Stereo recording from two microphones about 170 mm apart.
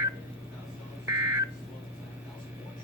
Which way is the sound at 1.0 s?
15° right (ahead or behind).